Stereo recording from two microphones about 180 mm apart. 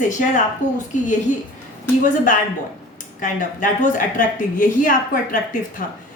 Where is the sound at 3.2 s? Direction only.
45° left (ahead or behind).